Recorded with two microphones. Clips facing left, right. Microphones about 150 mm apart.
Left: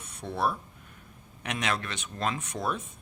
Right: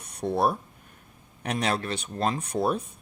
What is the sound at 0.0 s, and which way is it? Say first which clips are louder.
Speech: right 5 dB; 40° right (ahead or behind).